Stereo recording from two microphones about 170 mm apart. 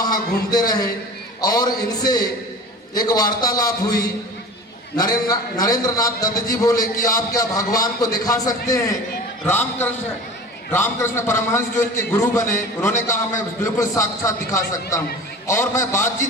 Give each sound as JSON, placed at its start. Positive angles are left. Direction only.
{"t": 0.0, "sound": "a man's voice", "side_deg": 25}